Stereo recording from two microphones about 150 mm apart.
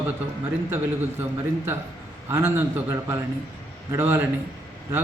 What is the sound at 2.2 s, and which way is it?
Speech, 15° right (ahead or behind).